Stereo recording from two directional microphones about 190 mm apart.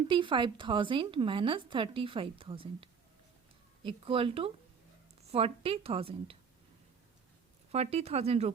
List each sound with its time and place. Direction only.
0.1 s a woman's voice: 25° right (ahead or behind)
7.7 s speech: 35° right (ahead or behind)